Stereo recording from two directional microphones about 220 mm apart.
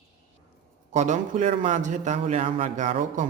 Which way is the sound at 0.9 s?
30° right (ahead or behind).